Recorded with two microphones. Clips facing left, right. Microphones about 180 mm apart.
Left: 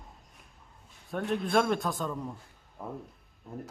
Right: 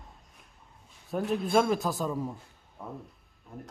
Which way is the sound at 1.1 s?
Centre (ahead or behind).